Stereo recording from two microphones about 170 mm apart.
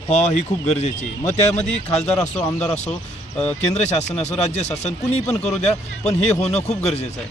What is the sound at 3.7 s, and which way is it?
Speech, 40° left (ahead or behind).